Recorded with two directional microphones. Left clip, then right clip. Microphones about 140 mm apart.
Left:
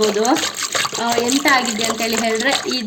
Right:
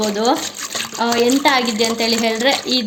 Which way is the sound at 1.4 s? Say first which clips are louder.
Right 1 dB; 30° right (ahead or behind).